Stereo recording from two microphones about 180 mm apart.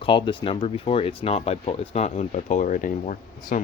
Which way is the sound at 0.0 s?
25° left (ahead or behind).